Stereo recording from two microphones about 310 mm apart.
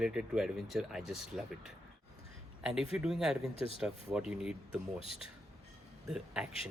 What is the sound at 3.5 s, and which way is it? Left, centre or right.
Speech, centre.